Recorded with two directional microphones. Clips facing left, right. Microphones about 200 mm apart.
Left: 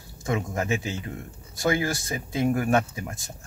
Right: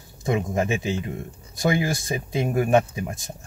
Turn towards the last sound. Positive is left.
turn(degrees=-15)  # may be behind; listen again after turning